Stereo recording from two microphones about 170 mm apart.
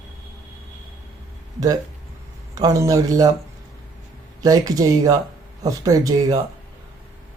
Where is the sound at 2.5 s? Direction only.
20° right (ahead or behind).